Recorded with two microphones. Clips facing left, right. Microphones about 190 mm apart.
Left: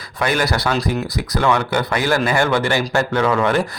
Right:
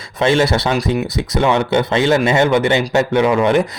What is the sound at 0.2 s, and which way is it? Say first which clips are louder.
A man's voice: right 5 dB; 25° right (ahead or behind).